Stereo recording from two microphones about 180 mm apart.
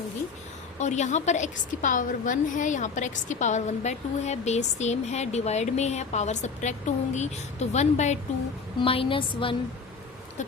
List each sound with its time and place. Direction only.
0.8 s a woman's voice: 40° left (ahead or behind)